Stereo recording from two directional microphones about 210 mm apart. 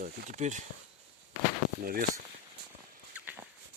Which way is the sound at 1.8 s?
45° right (ahead or behind).